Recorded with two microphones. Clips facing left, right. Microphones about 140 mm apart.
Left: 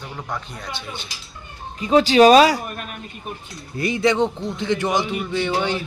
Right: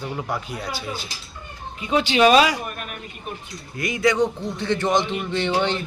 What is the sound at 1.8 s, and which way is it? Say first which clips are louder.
A man's voice: left 5 dB; 40° left (ahead or behind).